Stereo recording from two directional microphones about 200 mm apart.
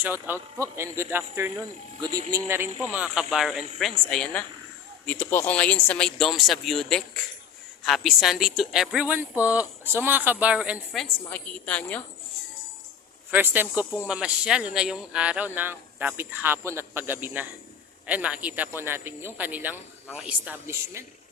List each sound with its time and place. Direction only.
0.0 s a man's voice: 10° right (ahead or behind); by 12.0 s 5° left (ahead or behind)
13.3 s a man's voice: 10° right (ahead or behind)